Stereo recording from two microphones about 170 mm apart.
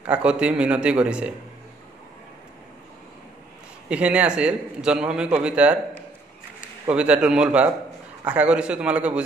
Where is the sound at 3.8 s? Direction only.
5° right (ahead or behind).